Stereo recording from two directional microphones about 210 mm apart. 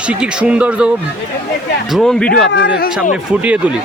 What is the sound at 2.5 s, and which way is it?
Speech, 55° left (ahead or behind).